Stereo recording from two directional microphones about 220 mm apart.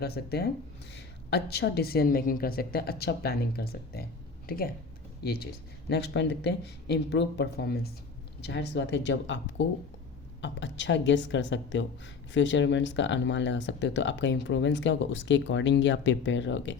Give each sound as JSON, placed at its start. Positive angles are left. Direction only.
{"t": 0.0, "sound": "a woman's voice", "side_deg": 45}